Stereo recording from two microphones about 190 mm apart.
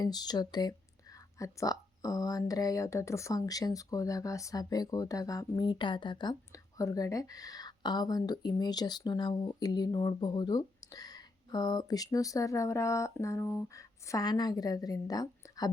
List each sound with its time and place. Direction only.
0.0 s a woman's voice: 20° left (ahead or behind)